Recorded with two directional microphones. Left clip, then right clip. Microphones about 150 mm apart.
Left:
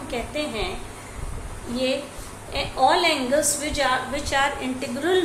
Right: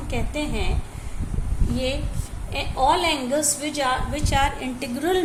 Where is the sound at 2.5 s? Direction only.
45° right (ahead or behind).